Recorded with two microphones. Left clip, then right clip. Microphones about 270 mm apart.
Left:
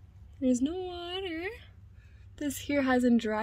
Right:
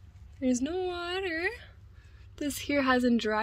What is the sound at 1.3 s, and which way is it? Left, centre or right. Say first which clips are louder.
Speech: right 5 dB; right.